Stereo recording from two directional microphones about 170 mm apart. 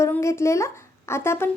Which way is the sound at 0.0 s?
15° left (ahead or behind).